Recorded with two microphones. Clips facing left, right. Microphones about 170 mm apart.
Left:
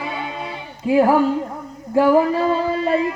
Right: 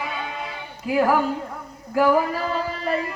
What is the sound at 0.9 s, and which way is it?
Speech, 25° left (ahead or behind).